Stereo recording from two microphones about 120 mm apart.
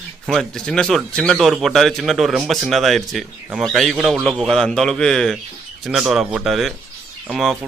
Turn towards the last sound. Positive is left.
turn(degrees=0)  # may be behind; listen again after turning